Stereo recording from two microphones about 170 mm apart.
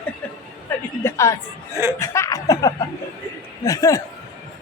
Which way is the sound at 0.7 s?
10° left (ahead or behind).